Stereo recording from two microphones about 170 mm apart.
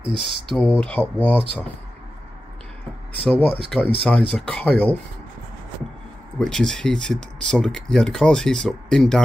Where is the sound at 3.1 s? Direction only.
10° left (ahead or behind).